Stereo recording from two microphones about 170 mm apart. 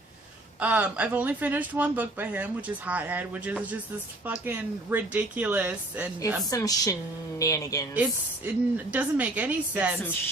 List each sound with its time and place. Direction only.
0.6 s speech: 10° right (ahead or behind)
6.5 s speech: 20° left (ahead or behind)
8.4 s speech: 10° right (ahead or behind)